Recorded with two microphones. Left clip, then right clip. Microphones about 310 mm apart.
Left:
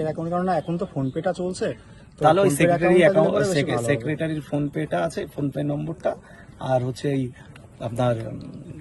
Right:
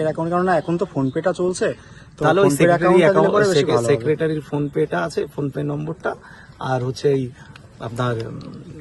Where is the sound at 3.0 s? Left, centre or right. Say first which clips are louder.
Right 3 dB; centre.